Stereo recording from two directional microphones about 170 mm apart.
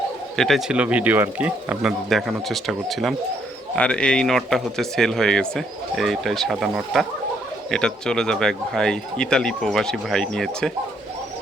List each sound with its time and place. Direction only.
0.3 s speech: centre (ahead or behind)